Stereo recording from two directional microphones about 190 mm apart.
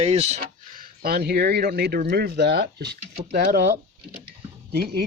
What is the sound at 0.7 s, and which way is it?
Speech, 55° right (ahead or behind).